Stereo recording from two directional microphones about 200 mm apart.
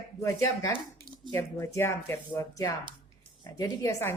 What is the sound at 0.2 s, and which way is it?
A woman's voice, 15° left (ahead or behind).